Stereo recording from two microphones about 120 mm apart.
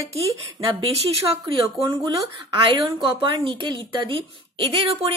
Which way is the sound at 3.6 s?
40° right (ahead or behind).